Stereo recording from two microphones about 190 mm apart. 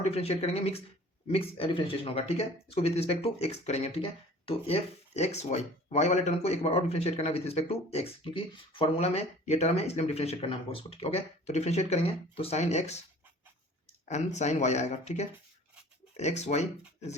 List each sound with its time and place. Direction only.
0.0 s speech: 35° left (ahead or behind)
14.1 s speech: 35° left (ahead or behind)